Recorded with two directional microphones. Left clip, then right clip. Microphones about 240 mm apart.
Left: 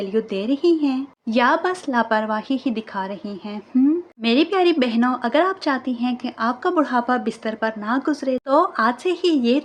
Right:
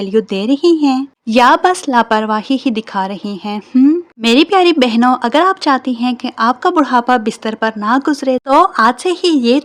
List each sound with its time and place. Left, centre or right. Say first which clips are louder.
0.0 s a woman's voice: right 8 dB; right